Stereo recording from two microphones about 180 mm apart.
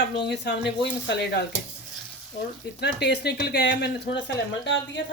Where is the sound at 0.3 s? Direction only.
70° left (ahead or behind).